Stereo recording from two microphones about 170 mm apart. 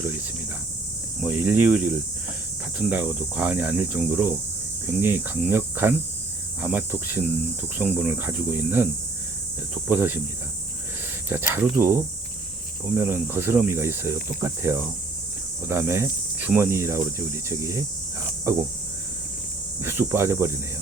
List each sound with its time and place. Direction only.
0.0 s cricket: 10° right (ahead or behind)
1.2 s speech: 10° right (ahead or behind)
9.9 s speech: 10° right (ahead or behind)
11.3 s speech: 15° right (ahead or behind)
13.0 s speech: 15° right (ahead or behind)
19.8 s speech: 15° right (ahead or behind)